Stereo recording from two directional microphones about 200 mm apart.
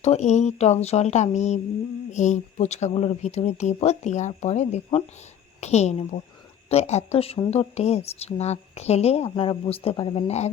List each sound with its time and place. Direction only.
0.0 s a woman's voice: 35° left (ahead or behind)